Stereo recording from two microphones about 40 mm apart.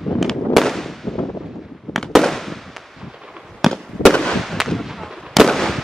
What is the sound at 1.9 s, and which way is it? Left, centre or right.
Fireworks, centre.